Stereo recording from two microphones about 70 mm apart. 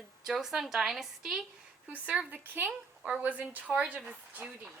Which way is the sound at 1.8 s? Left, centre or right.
Right.